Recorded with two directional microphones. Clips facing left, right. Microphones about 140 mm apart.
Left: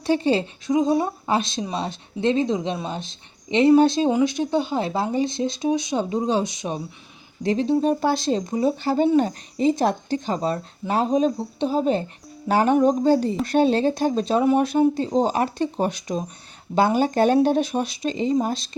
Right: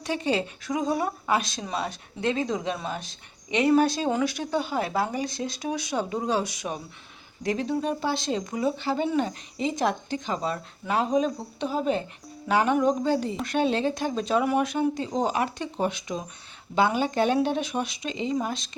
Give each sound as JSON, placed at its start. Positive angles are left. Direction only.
{"t": 0.0, "sound": "speech", "side_deg": 30}